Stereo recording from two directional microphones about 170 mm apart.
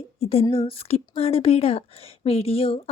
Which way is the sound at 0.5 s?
35° left (ahead or behind).